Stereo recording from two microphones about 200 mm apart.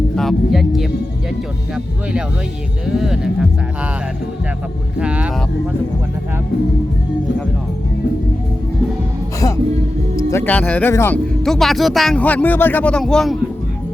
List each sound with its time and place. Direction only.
0.2 s speech: centre (ahead or behind)
2.8 s speech: centre (ahead or behind)
4.9 s speech: 5° right (ahead or behind)
10.2 s speech: 15° left (ahead or behind)